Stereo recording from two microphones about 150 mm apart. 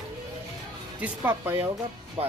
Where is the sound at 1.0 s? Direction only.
15° right (ahead or behind).